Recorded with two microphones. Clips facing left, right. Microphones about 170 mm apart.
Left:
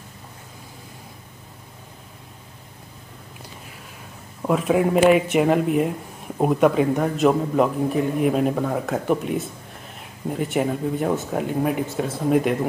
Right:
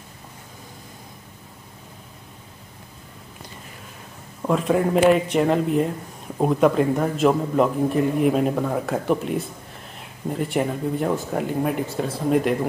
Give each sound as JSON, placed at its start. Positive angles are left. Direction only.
{"t": 4.4, "sound": "speech", "side_deg": 5}